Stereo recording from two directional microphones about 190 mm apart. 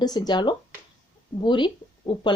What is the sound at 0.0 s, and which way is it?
Speech, 20° left (ahead or behind).